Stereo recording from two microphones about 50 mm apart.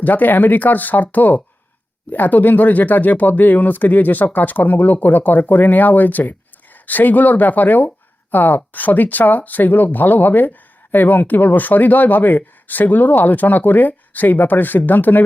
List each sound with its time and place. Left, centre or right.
0.0 s speech: left